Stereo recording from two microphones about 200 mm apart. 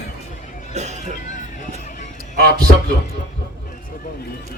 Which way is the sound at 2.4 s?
50° right (ahead or behind).